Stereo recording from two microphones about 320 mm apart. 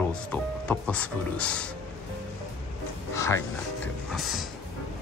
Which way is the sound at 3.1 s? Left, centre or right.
Centre.